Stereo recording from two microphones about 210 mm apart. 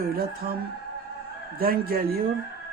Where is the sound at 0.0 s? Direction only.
45° right (ahead or behind).